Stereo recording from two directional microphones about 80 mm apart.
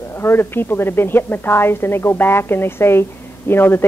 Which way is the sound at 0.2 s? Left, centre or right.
Left.